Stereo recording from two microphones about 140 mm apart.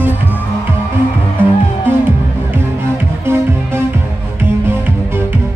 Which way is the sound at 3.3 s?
15° right (ahead or behind).